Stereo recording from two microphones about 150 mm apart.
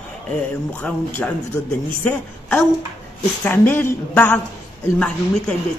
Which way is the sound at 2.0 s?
15° left (ahead or behind).